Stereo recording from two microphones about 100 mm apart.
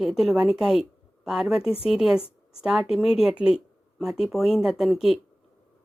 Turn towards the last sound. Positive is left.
turn(degrees=0)  # may be behind; listen again after turning